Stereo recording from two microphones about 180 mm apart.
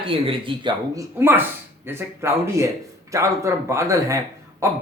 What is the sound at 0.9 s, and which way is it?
A man's voice, 10° right (ahead or behind).